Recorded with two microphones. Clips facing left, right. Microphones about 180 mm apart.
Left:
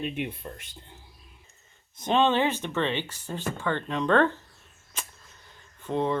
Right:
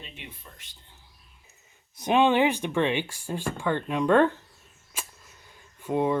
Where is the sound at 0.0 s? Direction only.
60° left (ahead or behind).